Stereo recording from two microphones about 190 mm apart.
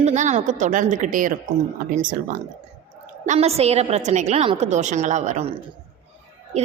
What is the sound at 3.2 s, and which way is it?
A woman's voice, 35° right (ahead or behind).